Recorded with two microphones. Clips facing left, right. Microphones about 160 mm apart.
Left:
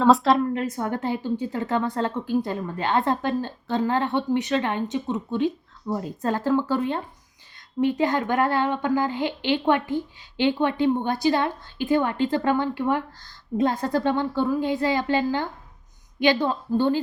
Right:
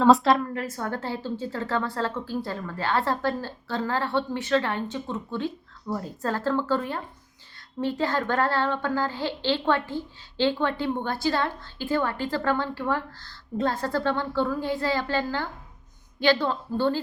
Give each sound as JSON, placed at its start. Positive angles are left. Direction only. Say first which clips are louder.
{"t": 0.0, "sound": "a woman's voice", "louder": "even", "side_deg": 0}
{"t": 0.3, "sound": "speech", "louder": "left 5 dB", "side_deg": 20}